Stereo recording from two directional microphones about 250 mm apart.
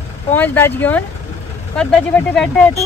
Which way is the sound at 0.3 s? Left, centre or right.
Centre.